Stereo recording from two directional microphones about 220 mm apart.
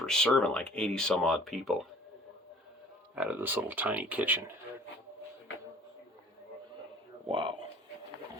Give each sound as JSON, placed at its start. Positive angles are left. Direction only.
{"t": 0.0, "sound": "speech", "side_deg": 5}
{"t": 3.2, "sound": "speech", "side_deg": -10}
{"t": 7.3, "sound": "speech", "side_deg": -20}